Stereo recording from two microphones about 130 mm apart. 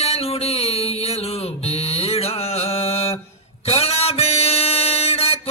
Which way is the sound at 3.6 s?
50° left (ahead or behind).